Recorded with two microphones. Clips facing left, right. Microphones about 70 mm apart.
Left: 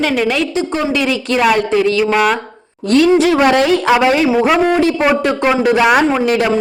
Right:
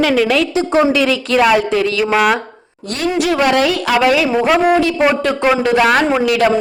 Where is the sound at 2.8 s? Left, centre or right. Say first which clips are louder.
Left 9 dB; left.